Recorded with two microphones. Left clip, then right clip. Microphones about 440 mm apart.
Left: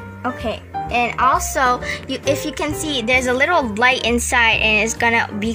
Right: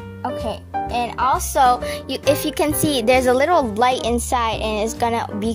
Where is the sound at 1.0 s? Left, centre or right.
Right.